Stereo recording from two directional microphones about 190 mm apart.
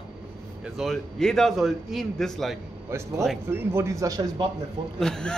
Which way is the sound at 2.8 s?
15° right (ahead or behind).